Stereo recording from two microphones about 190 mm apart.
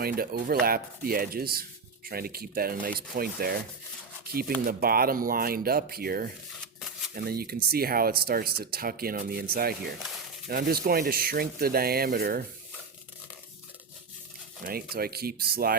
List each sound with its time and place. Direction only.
0.0 s speech: 50° right (ahead or behind)
14.6 s speech: 50° right (ahead or behind)